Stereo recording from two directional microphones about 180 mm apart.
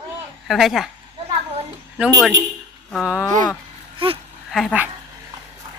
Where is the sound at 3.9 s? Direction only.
30° right (ahead or behind).